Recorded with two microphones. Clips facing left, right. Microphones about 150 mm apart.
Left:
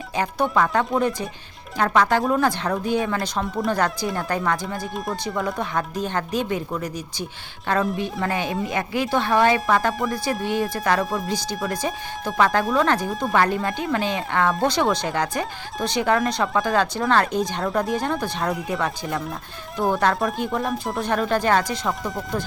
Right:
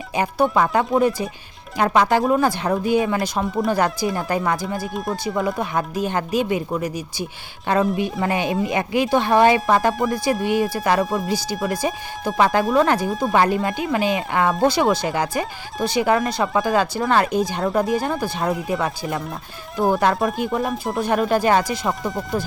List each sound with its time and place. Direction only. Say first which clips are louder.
0.2 s speech: right 3 dB; 10° right (ahead or behind)
10.4 s speech: right 3 dB; 5° right (ahead or behind)
13.1 s speech: right 3 dB; centre (ahead or behind)
13.3 s speech: right 2 dB; 15° right (ahead or behind)
13.6 s speech: right 2 dB; 5° right (ahead or behind)